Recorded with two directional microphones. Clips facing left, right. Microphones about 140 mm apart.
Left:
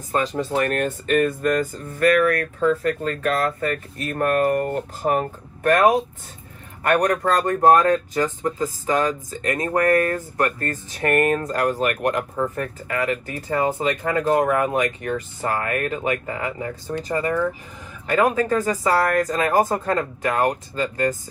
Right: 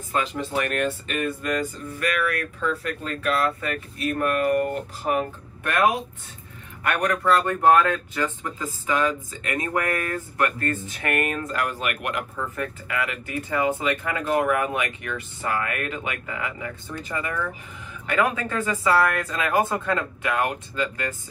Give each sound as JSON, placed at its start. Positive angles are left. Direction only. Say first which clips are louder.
{"t": 0.1, "sound": "speech", "louder": "left 4 dB", "side_deg": 40}